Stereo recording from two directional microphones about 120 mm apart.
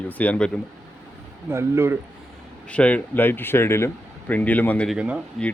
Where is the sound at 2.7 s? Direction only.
10° left (ahead or behind).